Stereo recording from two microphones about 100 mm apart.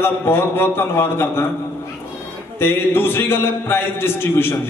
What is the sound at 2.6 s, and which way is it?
A man's voice, 25° left (ahead or behind).